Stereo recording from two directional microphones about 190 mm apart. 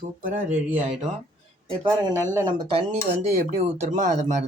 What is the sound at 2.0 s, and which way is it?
Speech, 20° right (ahead or behind).